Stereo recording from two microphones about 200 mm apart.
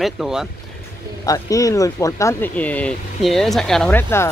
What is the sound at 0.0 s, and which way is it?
Speech, centre (ahead or behind).